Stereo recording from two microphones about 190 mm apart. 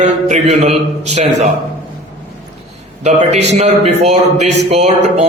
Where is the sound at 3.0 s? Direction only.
35° right (ahead or behind).